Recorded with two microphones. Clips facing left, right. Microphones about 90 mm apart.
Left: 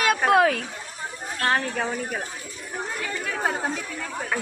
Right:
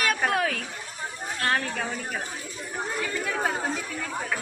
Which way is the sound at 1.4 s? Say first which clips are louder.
Left 3 dB; 15° left (ahead or behind).